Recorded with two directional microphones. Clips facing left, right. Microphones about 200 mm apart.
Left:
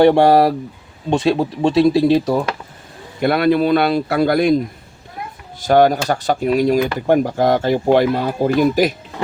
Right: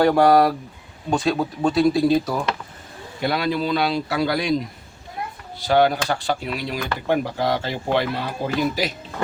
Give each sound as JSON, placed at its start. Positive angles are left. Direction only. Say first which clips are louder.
{"t": 0.0, "sound": "speech", "louder": "left 4 dB", "side_deg": 25}
{"t": 3.2, "sound": "a man's voice", "louder": "left 8 dB", "side_deg": 55}